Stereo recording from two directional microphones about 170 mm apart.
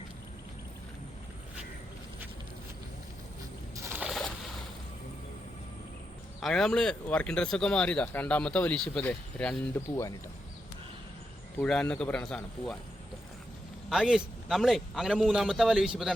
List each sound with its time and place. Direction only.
3.8 s a sound: 10° right (ahead or behind)
6.4 s speech: 5° left (ahead or behind)
9.9 s speech: 20° left (ahead or behind)
11.5 s speech: 5° left (ahead or behind)
13.9 s speech: centre (ahead or behind)